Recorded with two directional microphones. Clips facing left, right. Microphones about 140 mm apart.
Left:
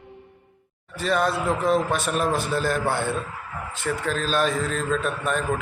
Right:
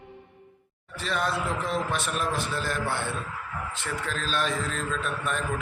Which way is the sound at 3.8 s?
40° left (ahead or behind).